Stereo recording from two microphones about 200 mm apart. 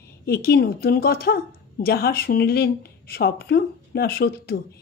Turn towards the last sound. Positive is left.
turn(degrees=50)  # may be behind; listen again after turning